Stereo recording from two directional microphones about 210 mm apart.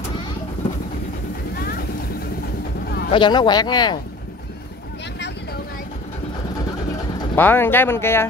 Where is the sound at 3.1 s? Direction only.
20° left (ahead or behind).